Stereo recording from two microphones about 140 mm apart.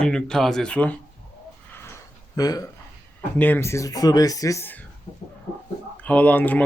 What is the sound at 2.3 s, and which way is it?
Speech, 25° left (ahead or behind).